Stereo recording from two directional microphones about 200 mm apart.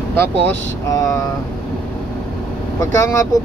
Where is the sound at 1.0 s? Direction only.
15° left (ahead or behind).